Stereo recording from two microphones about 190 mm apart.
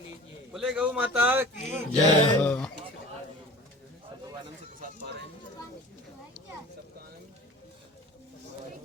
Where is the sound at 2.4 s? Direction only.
5° left (ahead or behind).